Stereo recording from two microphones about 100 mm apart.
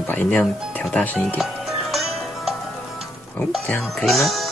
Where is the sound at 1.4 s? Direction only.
Centre (ahead or behind).